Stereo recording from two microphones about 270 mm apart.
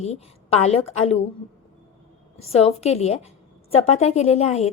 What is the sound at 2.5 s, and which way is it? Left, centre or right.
A woman's voice, left.